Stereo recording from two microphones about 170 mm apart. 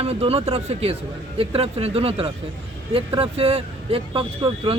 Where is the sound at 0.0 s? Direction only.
35° right (ahead or behind).